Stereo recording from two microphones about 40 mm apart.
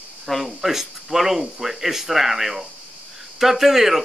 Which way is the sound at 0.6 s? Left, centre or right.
Centre.